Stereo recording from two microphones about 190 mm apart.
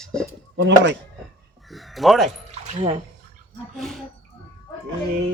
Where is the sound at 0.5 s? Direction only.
70° right (ahead or behind).